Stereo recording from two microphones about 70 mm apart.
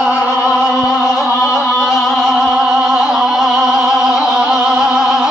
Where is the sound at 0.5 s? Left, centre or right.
Centre.